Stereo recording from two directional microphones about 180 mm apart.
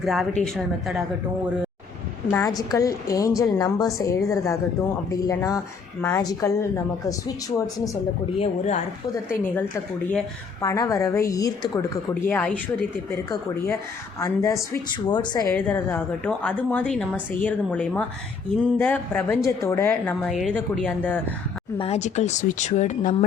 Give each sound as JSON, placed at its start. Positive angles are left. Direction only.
{"t": 0.0, "sound": "speech", "side_deg": 0}
{"t": 2.3, "sound": "a woman's voice", "side_deg": 20}
{"t": 8.4, "sound": "speech", "side_deg": 40}
{"t": 9.3, "sound": "a woman's voice", "side_deg": 10}
{"t": 14.2, "sound": "a woman's voice", "side_deg": 15}
{"t": 15.5, "sound": "a woman's voice", "side_deg": 10}
{"t": 21.8, "sound": "speech", "side_deg": 35}